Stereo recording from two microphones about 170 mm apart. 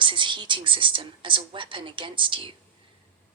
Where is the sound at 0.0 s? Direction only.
30° right (ahead or behind).